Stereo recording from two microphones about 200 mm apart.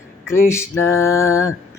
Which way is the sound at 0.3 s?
15° left (ahead or behind).